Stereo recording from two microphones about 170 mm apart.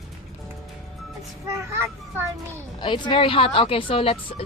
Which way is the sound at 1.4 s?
15° right (ahead or behind).